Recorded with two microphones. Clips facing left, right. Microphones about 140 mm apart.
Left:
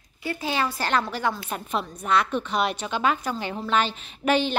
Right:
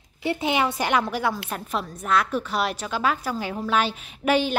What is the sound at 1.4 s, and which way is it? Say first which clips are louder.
A woman's voice: even; centre (ahead or behind).